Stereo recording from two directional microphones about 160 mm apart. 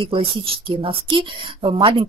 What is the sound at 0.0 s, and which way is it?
Speech, 35° right (ahead or behind).